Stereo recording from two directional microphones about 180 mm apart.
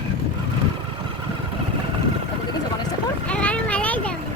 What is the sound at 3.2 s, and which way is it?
Children playing, 5° left (ahead or behind).